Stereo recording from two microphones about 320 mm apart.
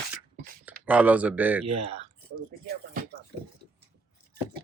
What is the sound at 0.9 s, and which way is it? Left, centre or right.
Speech, centre.